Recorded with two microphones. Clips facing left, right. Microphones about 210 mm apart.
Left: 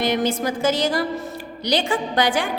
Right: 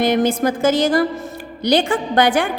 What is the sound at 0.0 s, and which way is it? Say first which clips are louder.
A woman's voice: right 5 dB; 50° right (ahead or behind).